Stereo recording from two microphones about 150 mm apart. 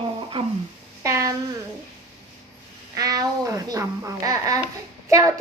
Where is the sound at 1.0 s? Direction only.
20° right (ahead or behind).